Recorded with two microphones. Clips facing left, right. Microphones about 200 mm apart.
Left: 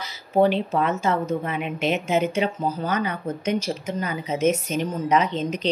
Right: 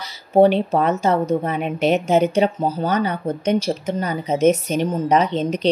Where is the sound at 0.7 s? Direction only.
35° right (ahead or behind).